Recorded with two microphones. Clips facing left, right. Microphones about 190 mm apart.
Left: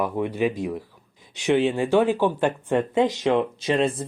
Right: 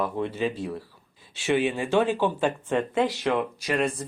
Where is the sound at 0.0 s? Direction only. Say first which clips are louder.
Left 3 dB; 15° left (ahead or behind).